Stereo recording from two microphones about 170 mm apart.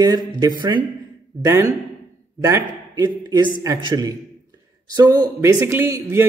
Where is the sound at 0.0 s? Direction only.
25° right (ahead or behind).